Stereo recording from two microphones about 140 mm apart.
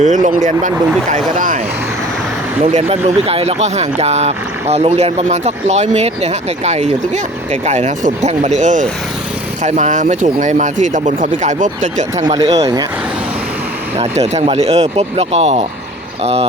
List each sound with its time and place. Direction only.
0.0 s speech: 65° right (ahead or behind)
2.6 s speech: 55° right (ahead or behind)
12.1 s speech: 25° right (ahead or behind)
14.0 s speech: 45° right (ahead or behind)